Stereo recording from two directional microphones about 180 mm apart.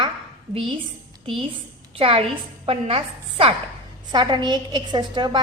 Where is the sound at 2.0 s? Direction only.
30° right (ahead or behind).